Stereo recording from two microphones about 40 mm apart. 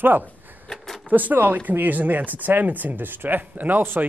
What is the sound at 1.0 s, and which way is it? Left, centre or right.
Speech, right.